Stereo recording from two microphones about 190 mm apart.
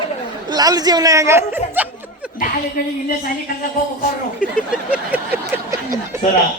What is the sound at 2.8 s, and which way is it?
Speech, 45° left (ahead or behind).